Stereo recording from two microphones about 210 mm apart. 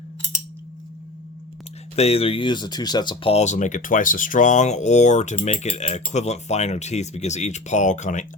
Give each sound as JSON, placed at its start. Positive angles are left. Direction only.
{"t": 2.0, "sound": "speech", "side_deg": 30}